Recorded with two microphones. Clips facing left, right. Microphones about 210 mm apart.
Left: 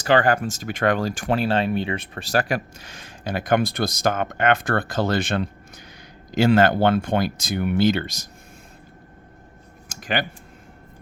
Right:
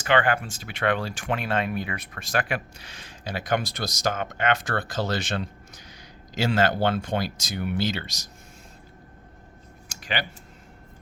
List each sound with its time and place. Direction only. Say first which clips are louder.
0.0 s speech: left 4 dB; 40° left (ahead or behind)
9.9 s typing: left 5 dB; 50° left (ahead or behind)